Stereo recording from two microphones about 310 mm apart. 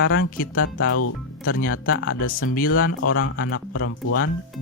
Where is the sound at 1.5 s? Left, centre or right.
Left.